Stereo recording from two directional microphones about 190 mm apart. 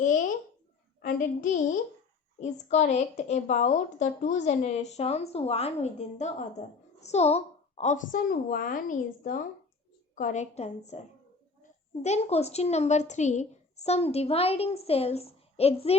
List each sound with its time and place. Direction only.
1.0 s child singing: 45° left (ahead or behind)
2.4 s speech: 40° left (ahead or behind)